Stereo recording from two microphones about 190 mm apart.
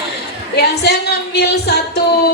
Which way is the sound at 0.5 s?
60° left (ahead or behind).